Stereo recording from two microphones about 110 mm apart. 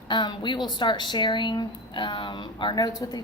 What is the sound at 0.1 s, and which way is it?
Speech, 45° left (ahead or behind).